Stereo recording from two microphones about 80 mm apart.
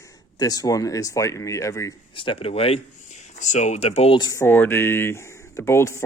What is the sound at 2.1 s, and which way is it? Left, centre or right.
Speech, left.